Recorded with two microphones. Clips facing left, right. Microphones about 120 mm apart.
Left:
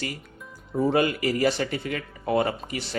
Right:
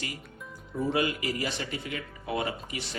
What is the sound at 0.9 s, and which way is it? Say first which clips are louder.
Speech: left 5 dB; 50° left (ahead or behind).